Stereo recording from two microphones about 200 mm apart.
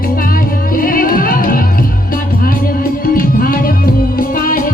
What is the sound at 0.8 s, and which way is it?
Music, 45° left (ahead or behind).